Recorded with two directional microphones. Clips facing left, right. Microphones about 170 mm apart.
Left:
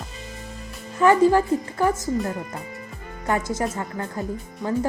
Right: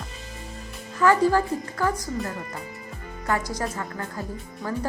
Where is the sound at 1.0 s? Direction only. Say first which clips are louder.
Left 3 dB; 20° left (ahead or behind).